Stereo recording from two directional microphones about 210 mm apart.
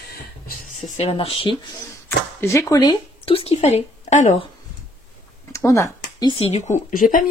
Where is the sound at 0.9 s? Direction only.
30° left (ahead or behind).